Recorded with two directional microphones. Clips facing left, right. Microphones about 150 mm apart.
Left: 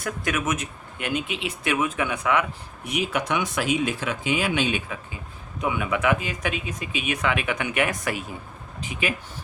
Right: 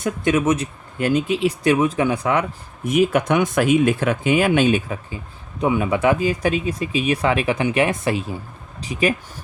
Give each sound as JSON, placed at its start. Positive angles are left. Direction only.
{"t": 0.0, "sound": "speech", "side_deg": -25}